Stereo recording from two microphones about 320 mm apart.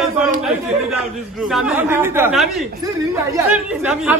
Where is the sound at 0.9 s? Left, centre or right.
Centre.